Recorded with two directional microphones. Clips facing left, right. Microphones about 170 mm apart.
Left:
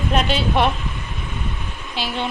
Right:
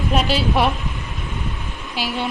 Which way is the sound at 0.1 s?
5° right (ahead or behind).